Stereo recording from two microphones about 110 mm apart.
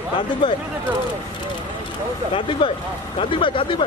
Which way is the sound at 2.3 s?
55° left (ahead or behind).